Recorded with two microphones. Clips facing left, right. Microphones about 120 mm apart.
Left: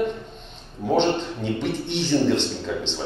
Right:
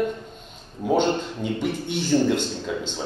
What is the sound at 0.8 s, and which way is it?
A man's voice, 5° right (ahead or behind).